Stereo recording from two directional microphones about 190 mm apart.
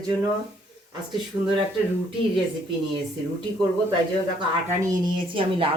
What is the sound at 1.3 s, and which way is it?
Speech, 15° right (ahead or behind).